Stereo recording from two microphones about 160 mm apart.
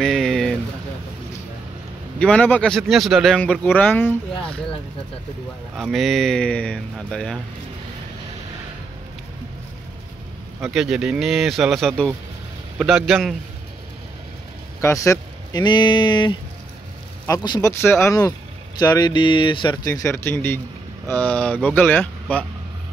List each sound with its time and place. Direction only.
0.0 s a sound: centre (ahead or behind)
2.1 s speech: 5° left (ahead or behind)
5.8 s speech: centre (ahead or behind)
10.6 s speech: 5° right (ahead or behind)
14.8 s speech: 20° left (ahead or behind)
19.9 s speech: 15° left (ahead or behind)